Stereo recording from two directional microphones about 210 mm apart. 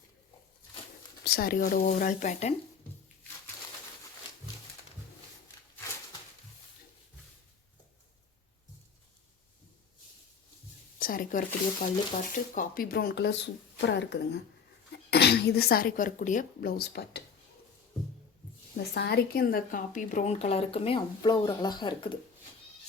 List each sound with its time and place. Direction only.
1.2 s speech: 45° left (ahead or behind)
11.0 s speech: 40° left (ahead or behind)
18.8 s a woman's voice: 50° left (ahead or behind); by 22.2 s 20° left (ahead or behind)